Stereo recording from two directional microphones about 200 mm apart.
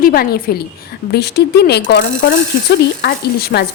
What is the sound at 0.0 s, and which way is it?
A woman's voice, 50° left (ahead or behind).